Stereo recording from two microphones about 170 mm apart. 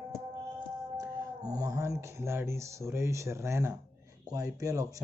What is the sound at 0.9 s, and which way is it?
Speech, 20° right (ahead or behind).